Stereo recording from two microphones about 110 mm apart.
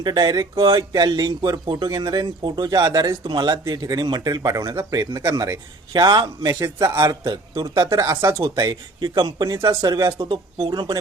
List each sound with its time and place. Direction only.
0.0 s speech: 40° right (ahead or behind)
8.5 s speech: 35° right (ahead or behind)
10.2 s speech: 50° right (ahead or behind)